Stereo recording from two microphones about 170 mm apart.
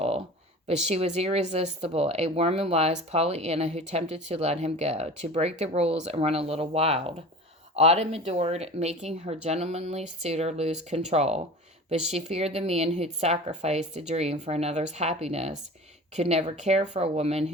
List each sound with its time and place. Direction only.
0.9 s speech: 40° right (ahead or behind)